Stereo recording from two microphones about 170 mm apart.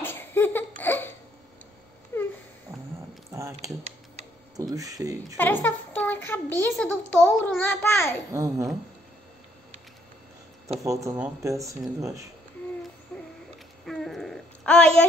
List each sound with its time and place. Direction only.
0.0 s laughter: 10° left (ahead or behind)
2.1 s a sound: 15° left (ahead or behind)
3.3 s mechanisms: 15° right (ahead or behind)
4.6 s speech: 20° right (ahead or behind)
5.4 s a child's voice: 10° left (ahead or behind)
8.3 s speech: 20° right (ahead or behind)
10.8 s speech: 20° right (ahead or behind)
13.1 s owl: 5° left (ahead or behind)
13.8 s a sound: centre (ahead or behind)